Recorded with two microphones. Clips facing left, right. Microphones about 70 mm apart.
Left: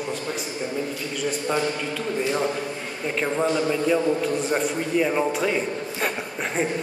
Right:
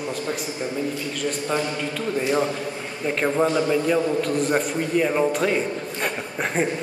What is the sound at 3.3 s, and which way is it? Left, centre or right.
A man's voice, centre.